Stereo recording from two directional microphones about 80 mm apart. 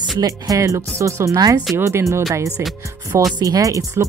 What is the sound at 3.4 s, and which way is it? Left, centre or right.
Speech, right.